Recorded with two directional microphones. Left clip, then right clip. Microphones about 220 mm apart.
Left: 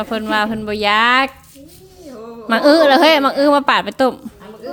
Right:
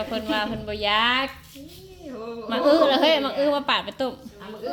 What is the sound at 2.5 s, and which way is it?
Speech, 55° left (ahead or behind).